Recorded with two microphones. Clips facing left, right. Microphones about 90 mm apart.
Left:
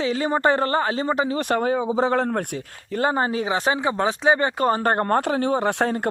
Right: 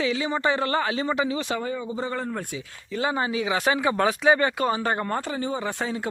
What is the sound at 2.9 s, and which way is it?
Speech, 45° left (ahead or behind).